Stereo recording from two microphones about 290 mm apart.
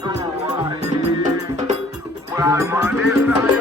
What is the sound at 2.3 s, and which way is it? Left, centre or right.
Music, centre.